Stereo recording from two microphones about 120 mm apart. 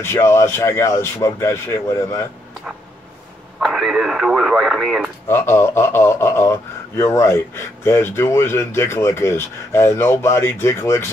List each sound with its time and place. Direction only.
0.0 s speech: 20° left (ahead or behind)
3.5 s speech: centre (ahead or behind)
5.3 s speech: 20° left (ahead or behind)